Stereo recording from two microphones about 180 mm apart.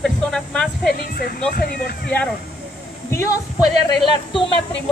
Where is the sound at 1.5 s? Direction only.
60° left (ahead or behind).